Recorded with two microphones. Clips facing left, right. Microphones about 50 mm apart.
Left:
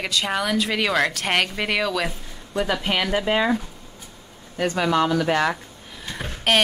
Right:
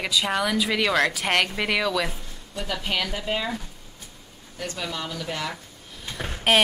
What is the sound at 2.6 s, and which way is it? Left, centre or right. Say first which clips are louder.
Speech: left 4 dB; left.